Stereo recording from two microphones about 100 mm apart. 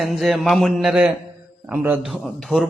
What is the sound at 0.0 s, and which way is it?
A man's voice, centre (ahead or behind).